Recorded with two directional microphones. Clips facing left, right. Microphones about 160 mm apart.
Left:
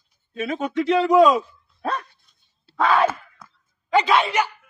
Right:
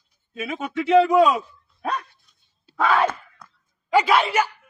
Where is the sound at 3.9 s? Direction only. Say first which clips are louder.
Even; 10° right (ahead or behind).